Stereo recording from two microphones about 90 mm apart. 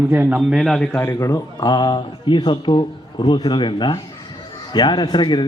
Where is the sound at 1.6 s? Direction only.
55° left (ahead or behind).